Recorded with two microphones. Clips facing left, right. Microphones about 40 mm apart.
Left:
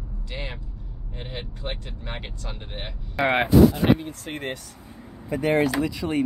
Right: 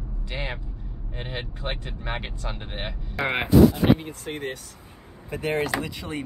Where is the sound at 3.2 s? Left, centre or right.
Centre.